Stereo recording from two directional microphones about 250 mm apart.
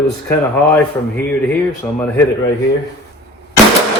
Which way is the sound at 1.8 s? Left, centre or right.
Centre.